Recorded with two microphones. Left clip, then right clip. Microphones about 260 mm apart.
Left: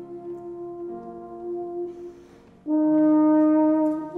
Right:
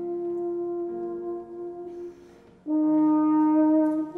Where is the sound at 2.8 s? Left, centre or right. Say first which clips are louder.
Left 3 dB; left.